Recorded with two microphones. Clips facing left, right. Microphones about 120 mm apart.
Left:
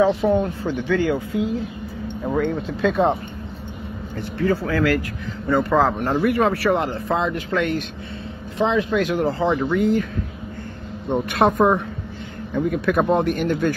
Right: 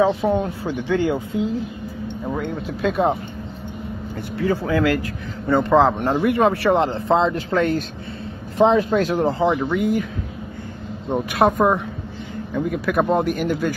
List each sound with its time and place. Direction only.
0.0 s speech: 15° right (ahead or behind)
2.3 s speech: 5° right (ahead or behind)
4.2 s a man's voice: 15° right (ahead or behind); by 9.2 s 35° right (ahead or behind)
9.2 s speech: 15° right (ahead or behind)
11.1 s speech: 10° right (ahead or behind)